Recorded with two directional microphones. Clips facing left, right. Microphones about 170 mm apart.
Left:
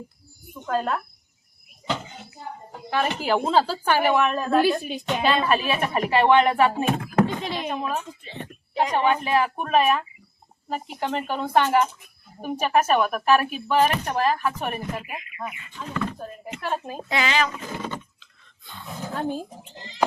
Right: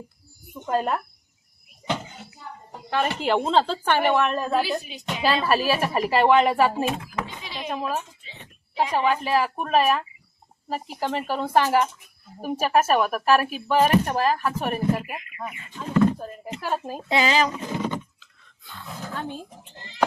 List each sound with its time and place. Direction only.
0.6 s speech: 10° right (ahead or behind)
2.9 s speech: 5° left (ahead or behind)
4.6 s speech: 55° left (ahead or behind)
5.2 s speech: 5° right (ahead or behind)
6.8 s a sound: 55° left (ahead or behind)
7.7 s speech: 5° right (ahead or behind)
8.2 s speech: 50° left (ahead or behind)
8.7 s speech: 5° right (ahead or behind)
16.6 s speech: 5° right (ahead or behind)
17.1 s speech: 30° right (ahead or behind)
17.5 s speech: 20° right (ahead or behind)
19.1 s speech: 35° left (ahead or behind)
19.5 s speech: 15° left (ahead or behind)